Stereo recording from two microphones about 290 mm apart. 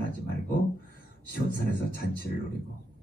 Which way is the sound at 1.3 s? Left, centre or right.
Left.